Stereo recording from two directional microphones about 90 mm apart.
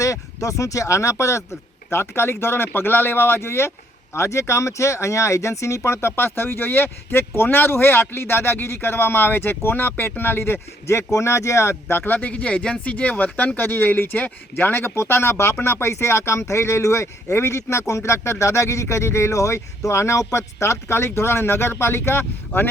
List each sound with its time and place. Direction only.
0.0 s speech: 35° left (ahead or behind)